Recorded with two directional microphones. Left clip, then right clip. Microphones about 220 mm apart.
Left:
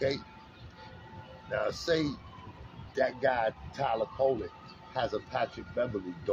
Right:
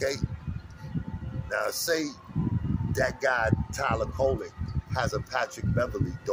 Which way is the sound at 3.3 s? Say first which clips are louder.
Right 3 dB; 5° right (ahead or behind).